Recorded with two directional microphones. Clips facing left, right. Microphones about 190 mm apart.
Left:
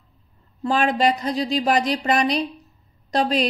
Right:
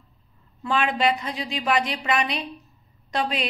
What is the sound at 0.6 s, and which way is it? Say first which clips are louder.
A woman's voice: left 4 dB; 40° left (ahead or behind).